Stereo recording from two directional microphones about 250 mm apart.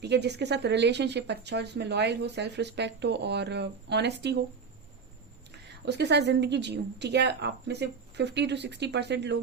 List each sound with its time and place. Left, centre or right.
0.0 s speech: right
5.6 s speech: right